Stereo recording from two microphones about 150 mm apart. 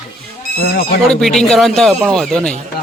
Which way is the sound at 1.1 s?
5° left (ahead or behind).